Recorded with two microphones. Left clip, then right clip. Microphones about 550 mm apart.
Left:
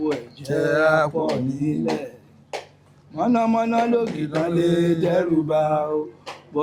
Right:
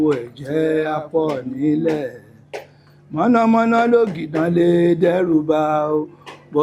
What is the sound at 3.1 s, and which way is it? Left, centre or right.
Speech, right.